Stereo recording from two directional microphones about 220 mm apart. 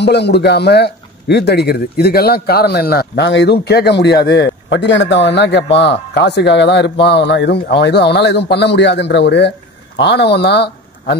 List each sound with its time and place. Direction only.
0.0 s a man's voice: 50° left (ahead or behind)